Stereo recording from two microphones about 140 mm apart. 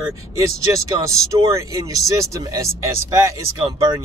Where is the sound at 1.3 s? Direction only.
25° right (ahead or behind).